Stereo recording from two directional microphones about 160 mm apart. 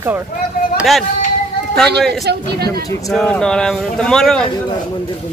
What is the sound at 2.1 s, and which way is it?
Speech, 90° right.